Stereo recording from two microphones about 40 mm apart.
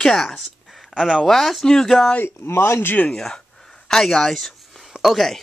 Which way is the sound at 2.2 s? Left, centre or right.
Left.